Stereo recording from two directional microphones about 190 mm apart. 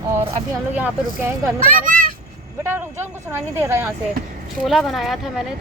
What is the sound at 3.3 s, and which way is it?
Speech, 10° right (ahead or behind).